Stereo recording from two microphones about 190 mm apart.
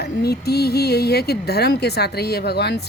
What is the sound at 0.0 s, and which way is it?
Speech, 55° left (ahead or behind).